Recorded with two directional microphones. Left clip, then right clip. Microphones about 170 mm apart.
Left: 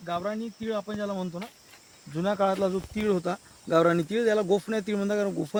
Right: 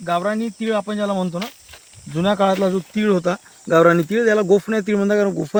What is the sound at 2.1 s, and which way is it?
Speech, 30° left (ahead or behind).